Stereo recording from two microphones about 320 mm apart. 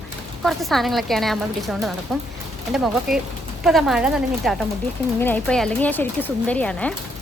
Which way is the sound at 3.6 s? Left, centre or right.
Centre.